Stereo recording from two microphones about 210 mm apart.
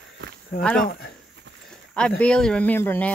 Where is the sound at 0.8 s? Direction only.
45° left (ahead or behind).